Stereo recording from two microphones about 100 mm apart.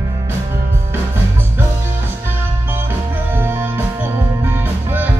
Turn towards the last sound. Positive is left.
turn(degrees=-20)  # may be behind; listen again after turning